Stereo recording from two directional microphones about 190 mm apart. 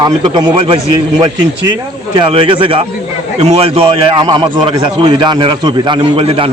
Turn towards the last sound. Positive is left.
turn(degrees=-30)  # may be behind; listen again after turning